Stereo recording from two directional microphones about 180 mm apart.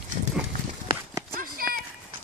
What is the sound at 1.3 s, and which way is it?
Clip-clop, 55° right (ahead or behind).